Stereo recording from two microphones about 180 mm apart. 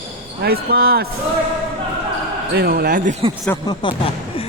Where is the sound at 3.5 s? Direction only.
15° left (ahead or behind).